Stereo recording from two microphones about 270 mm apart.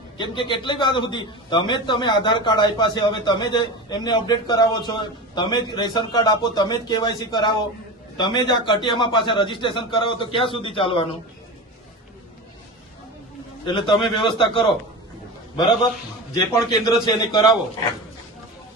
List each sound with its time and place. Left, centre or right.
0.2 s a man's voice: centre
13.7 s a man's voice: centre